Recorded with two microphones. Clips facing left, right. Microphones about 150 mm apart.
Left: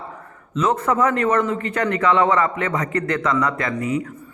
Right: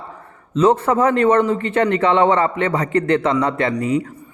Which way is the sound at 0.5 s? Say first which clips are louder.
Right 5 dB; 30° right (ahead or behind).